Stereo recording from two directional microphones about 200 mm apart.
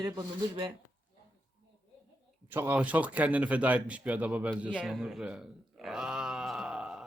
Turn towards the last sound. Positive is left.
turn(degrees=-5)  # may be behind; listen again after turning